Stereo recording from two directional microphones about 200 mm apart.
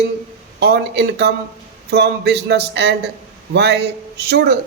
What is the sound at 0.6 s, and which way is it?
A man's voice, 55° right (ahead or behind).